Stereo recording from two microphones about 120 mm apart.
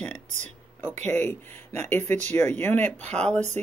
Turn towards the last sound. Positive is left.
turn(degrees=10)  # may be behind; listen again after turning